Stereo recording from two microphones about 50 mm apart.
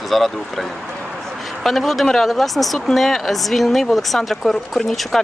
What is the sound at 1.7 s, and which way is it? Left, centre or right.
Speech, centre.